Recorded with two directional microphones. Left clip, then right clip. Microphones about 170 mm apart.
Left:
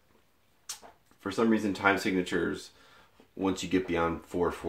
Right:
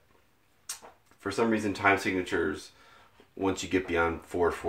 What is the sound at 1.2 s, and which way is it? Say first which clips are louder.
Speech: even; 25° left (ahead or behind).